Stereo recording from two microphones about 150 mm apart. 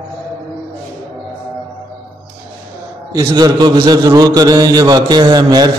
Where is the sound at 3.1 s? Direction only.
20° right (ahead or behind).